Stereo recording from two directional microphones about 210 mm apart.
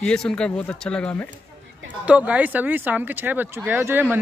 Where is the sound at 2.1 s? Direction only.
5° right (ahead or behind).